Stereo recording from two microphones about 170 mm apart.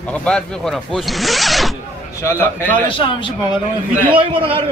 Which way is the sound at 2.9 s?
30° left (ahead or behind).